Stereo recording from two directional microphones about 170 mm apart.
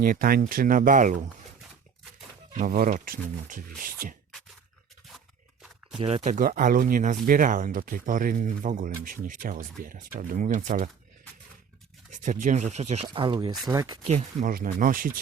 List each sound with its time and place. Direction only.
0.0 s speech: 55° right (ahead or behind)
2.6 s speech: 50° right (ahead or behind)
6.0 s speech: 35° right (ahead or behind)
12.1 s speech: 50° right (ahead or behind)
13.2 s speech: 25° right (ahead or behind)
14.1 s speech: 40° right (ahead or behind)
14.5 s speech: 55° right (ahead or behind)